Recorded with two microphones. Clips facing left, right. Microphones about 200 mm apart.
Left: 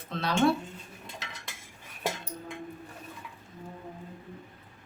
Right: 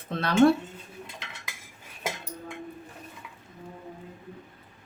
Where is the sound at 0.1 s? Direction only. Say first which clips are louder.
Right 6 dB; 55° right (ahead or behind).